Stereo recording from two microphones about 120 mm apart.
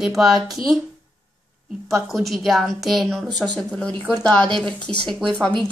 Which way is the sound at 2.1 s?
Centre (ahead or behind).